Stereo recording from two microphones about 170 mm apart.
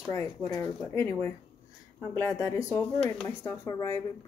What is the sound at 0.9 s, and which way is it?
Speech, 15° left (ahead or behind).